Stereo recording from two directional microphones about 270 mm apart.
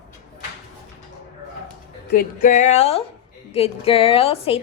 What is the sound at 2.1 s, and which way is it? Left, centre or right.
A woman's voice, left.